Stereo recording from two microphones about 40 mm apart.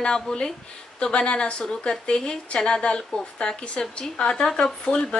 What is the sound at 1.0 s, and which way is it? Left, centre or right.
A woman's voice, left.